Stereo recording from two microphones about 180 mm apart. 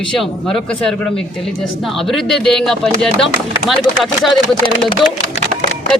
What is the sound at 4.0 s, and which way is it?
Speech, centre (ahead or behind).